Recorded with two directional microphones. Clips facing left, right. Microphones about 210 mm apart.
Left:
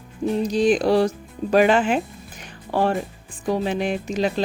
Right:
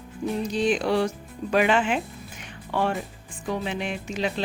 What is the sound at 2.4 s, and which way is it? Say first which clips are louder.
Music: left 4 dB; 40° left (ahead or behind).